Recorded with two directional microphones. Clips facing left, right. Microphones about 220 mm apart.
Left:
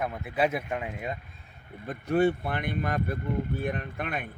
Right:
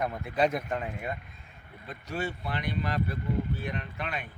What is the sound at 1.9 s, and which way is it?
Speech, 55° left (ahead or behind).